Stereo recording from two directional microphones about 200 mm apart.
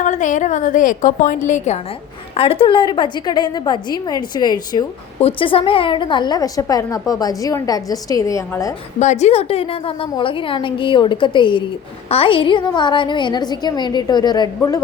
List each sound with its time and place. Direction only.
0.0 s a woman's voice: 40° left (ahead or behind); by 8.7 s 15° left (ahead or behind)
9.0 s a woman's voice: 35° left (ahead or behind); by 14.8 s 20° left (ahead or behind)